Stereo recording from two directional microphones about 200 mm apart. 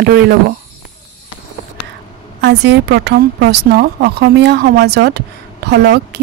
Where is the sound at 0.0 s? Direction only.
50° right (ahead or behind).